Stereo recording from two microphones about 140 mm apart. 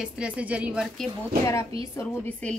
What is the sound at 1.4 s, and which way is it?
Speech, 20° left (ahead or behind).